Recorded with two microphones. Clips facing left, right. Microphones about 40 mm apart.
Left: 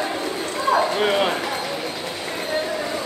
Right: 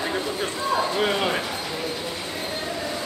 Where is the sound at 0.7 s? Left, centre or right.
Centre.